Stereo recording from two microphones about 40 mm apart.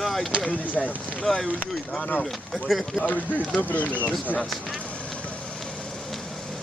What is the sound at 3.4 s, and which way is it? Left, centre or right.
Speech, left.